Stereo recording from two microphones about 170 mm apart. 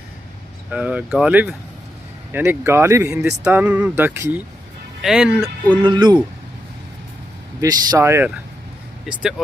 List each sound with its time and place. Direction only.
0.7 s speech: 10° right (ahead or behind)
3.2 s speech: 5° right (ahead or behind)
5.0 s speech: centre (ahead or behind)
5.8 s speech: 25° right (ahead or behind)
7.6 s speech: 20° right (ahead or behind)
9.1 s speech: centre (ahead or behind)